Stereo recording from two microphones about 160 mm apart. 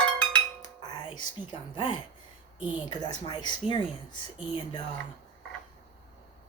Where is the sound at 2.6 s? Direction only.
10° right (ahead or behind).